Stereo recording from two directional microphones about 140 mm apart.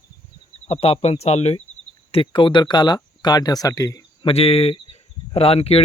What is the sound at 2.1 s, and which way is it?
Speech, 35° left (ahead or behind).